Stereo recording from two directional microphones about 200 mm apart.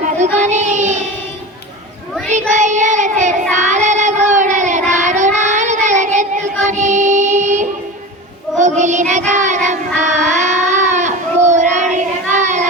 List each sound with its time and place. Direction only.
0.0 s child singing: 35° right (ahead or behind)
2.5 s child singing: 35° right (ahead or behind)
6.7 s music: 35° right (ahead or behind)
8.8 s child singing: 35° right (ahead or behind)
10.3 s a sound: 35° right (ahead or behind)
11.4 s child singing: 35° right (ahead or behind)